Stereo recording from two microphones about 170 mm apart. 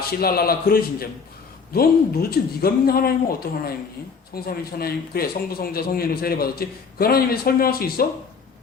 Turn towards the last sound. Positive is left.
turn(degrees=65)  # may be behind; listen again after turning